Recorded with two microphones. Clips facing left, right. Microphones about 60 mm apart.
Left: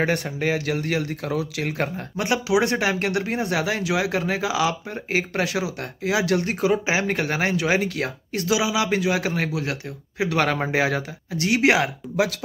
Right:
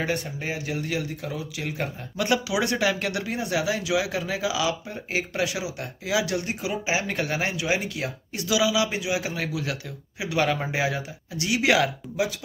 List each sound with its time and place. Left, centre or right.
0.0 s speech: left
2.1 s speech: left
8.5 s speech: left
8.8 s speech: left